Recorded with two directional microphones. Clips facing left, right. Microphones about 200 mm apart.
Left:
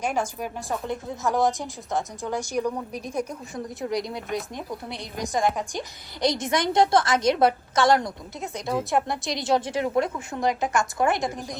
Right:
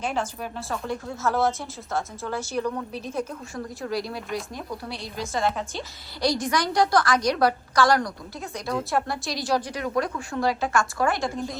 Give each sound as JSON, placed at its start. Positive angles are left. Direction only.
{"t": 0.0, "sound": "a woman's voice", "side_deg": 10}